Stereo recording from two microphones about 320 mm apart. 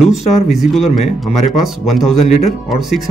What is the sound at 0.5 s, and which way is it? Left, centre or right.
Speech, centre.